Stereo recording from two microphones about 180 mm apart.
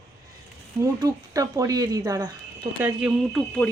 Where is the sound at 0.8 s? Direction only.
20° right (ahead or behind).